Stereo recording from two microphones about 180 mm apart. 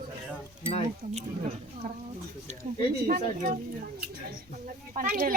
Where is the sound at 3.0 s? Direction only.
50° right (ahead or behind).